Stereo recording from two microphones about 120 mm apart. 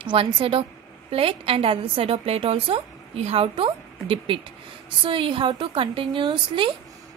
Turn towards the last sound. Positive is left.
turn(degrees=-45)  # may be behind; listen again after turning